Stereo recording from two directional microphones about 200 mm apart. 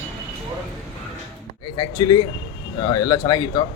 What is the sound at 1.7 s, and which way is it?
Speech, 20° left (ahead or behind).